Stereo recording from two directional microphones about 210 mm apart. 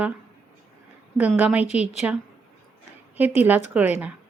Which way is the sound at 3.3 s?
10° right (ahead or behind).